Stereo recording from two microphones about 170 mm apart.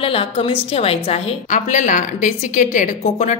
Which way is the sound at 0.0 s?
35° left (ahead or behind).